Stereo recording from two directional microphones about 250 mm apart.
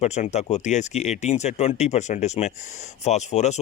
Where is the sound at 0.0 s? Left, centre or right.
Left.